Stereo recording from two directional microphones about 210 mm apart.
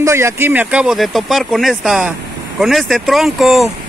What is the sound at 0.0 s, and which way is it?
Speech, 15° right (ahead or behind).